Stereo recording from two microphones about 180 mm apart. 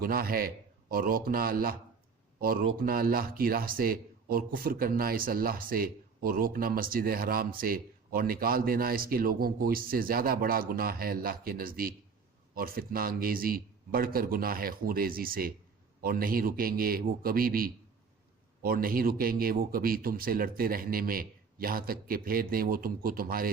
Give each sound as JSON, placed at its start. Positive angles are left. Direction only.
{"t": 0.0, "sound": "a man's voice", "side_deg": -55}